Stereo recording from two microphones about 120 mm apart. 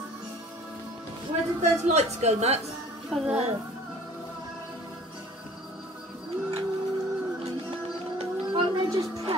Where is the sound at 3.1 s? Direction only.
Centre (ahead or behind).